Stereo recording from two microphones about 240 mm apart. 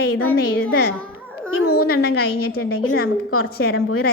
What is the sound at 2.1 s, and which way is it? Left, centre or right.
A child's voice, left.